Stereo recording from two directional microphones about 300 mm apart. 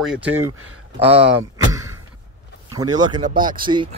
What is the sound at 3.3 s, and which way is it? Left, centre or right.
Speech, right.